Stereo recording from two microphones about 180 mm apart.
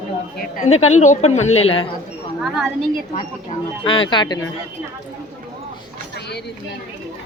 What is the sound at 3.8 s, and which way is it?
Speech, 30° left (ahead or behind).